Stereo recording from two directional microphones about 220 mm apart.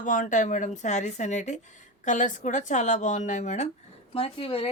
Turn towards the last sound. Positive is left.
turn(degrees=25)  # may be behind; listen again after turning